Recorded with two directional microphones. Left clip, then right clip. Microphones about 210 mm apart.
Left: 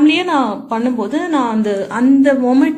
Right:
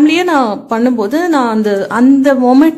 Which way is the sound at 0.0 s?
35° right (ahead or behind).